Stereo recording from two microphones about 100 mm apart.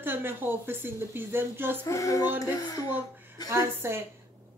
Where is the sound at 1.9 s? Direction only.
30° left (ahead or behind).